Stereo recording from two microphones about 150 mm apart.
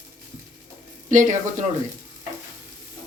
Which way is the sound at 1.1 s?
60° right (ahead or behind).